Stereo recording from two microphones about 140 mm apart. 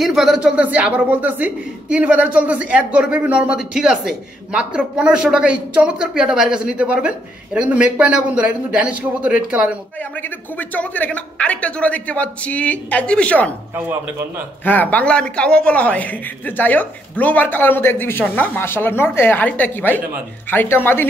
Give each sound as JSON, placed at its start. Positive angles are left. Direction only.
{"t": 0.0, "sound": "speech", "side_deg": 0}
{"t": 10.6, "sound": "a man's voice", "side_deg": 10}
{"t": 13.7, "sound": "speech", "side_deg": -15}
{"t": 14.6, "sound": "a man's voice", "side_deg": 10}